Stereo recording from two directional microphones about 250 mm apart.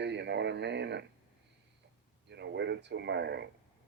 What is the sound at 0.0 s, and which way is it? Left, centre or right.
Speech, right.